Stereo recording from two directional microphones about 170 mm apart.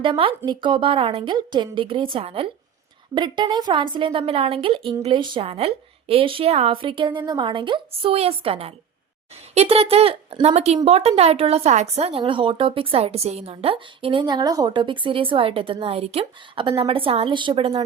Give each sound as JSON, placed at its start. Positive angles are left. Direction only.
{"t": 0.0, "sound": "a woman's voice", "side_deg": -30}